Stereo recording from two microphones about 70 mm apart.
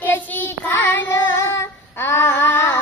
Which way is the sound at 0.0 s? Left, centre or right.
Left.